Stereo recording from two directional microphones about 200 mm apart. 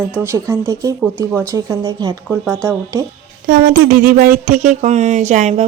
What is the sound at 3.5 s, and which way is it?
Speech, 45° right (ahead or behind).